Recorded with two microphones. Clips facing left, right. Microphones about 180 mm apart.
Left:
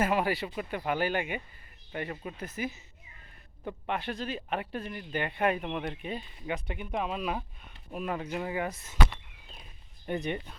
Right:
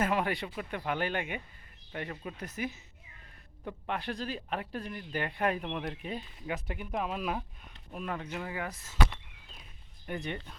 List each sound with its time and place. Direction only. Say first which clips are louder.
0.0 s speech: left 2 dB; 5° left (ahead or behind)
8.3 s speech: left 5 dB; 20° left (ahead or behind)
10.1 s speech: left 5 dB; 20° left (ahead or behind)